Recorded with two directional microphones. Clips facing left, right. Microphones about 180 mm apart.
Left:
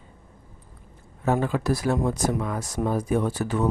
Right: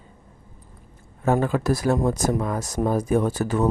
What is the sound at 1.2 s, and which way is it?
Speech, 45° right (ahead or behind).